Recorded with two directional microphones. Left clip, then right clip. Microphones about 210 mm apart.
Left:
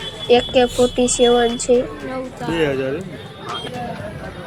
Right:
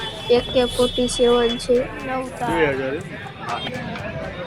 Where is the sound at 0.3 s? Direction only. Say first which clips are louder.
Left 4 dB; 10° left (ahead or behind).